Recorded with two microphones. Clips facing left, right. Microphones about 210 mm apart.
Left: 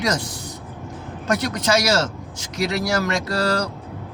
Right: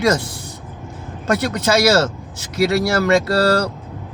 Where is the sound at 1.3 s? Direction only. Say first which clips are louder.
Right 3 dB; 65° right (ahead or behind).